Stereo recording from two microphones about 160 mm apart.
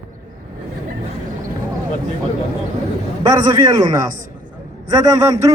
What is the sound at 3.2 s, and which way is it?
A man's voice, 25° right (ahead or behind).